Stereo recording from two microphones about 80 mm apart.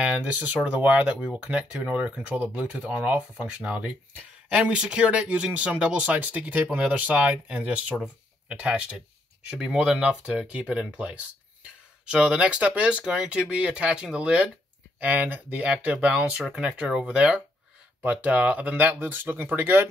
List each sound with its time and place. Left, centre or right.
0.0 s speech: centre